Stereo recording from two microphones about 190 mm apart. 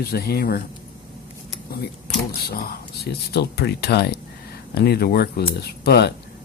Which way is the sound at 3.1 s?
60° left (ahead or behind).